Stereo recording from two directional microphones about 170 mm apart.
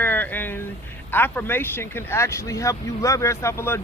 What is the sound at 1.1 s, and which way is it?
A man's voice, 10° left (ahead or behind).